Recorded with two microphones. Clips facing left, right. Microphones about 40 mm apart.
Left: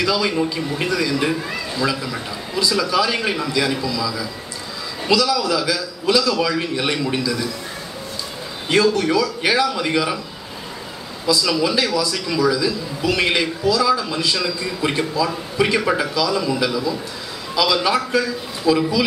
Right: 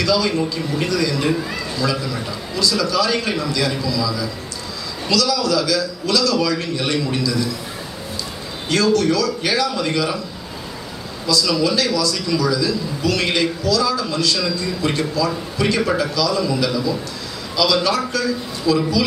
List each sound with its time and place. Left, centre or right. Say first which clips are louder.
0.0 s a man's voice: right 1 dB; centre
2.5 s a man's voice: even; centre
8.6 s a man's voice: even; centre
11.2 s a man's voice: even; centre